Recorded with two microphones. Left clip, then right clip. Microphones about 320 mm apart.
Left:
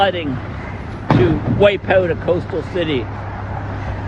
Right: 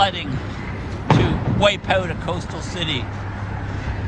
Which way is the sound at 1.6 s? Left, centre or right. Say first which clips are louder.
Left 5 dB; centre.